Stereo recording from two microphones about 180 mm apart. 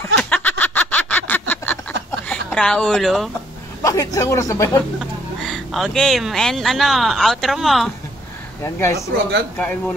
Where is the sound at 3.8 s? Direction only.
15° left (ahead or behind).